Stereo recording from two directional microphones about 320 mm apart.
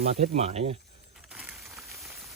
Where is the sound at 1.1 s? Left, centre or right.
Centre.